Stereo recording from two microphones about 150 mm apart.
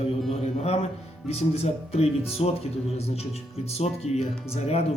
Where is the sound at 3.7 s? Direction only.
45° left (ahead or behind).